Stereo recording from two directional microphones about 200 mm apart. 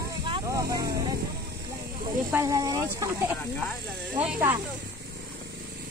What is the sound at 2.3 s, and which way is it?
Speech, 15° right (ahead or behind).